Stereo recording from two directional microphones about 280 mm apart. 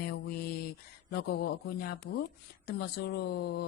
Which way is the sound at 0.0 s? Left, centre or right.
Left.